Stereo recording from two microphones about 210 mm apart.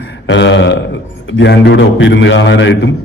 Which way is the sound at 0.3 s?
60° left (ahead or behind).